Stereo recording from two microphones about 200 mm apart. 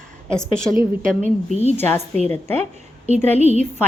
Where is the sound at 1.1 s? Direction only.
30° left (ahead or behind).